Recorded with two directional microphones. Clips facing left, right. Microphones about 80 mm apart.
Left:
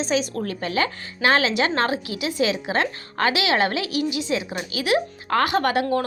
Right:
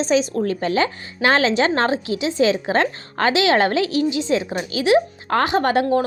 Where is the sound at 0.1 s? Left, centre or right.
Right.